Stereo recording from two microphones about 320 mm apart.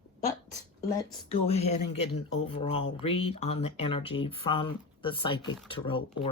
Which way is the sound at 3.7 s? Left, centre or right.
Centre.